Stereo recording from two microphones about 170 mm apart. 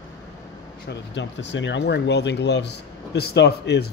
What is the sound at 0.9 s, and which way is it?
Speech, 90° left.